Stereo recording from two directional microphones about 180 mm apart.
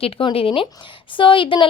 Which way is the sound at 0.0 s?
30° left (ahead or behind).